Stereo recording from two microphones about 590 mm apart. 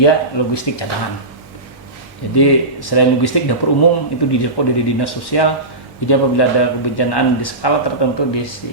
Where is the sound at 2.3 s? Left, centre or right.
Left.